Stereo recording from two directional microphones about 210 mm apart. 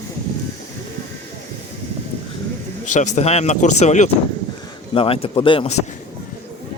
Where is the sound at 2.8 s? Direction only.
35° left (ahead or behind).